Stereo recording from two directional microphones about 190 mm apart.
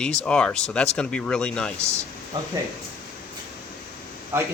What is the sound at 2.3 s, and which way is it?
Speech, 20° right (ahead or behind).